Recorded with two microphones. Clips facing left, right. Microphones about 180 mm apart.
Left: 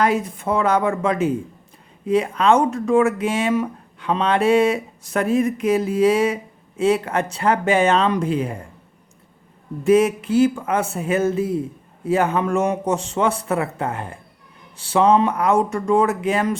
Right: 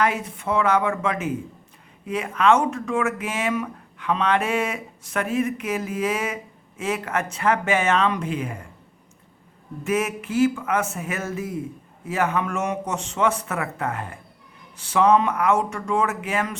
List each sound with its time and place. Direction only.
0.0 s speech: 35° left (ahead or behind)
9.8 s speech: 30° left (ahead or behind)